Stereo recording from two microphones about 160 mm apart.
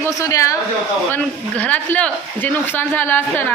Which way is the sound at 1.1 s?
10° left (ahead or behind).